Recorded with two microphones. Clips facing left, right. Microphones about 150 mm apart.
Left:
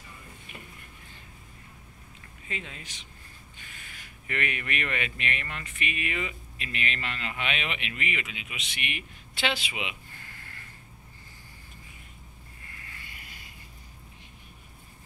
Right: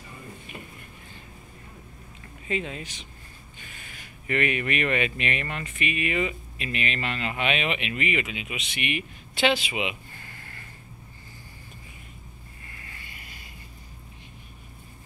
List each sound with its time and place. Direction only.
2.4 s speech: 20° right (ahead or behind)
4.3 s speech: 10° right (ahead or behind)